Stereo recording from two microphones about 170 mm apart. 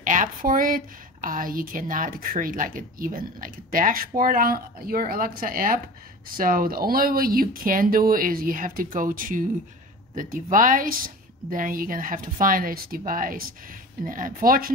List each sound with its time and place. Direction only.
0.0 s a woman's voice: 50° right (ahead or behind)